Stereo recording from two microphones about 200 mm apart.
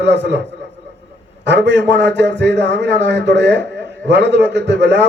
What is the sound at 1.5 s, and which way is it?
A man's voice, 60° right (ahead or behind).